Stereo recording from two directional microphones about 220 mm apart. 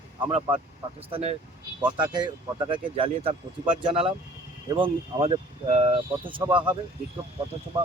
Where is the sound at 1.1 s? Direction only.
25° right (ahead or behind).